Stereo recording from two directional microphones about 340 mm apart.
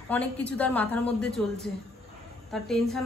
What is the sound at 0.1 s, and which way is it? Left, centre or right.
A woman's voice, centre.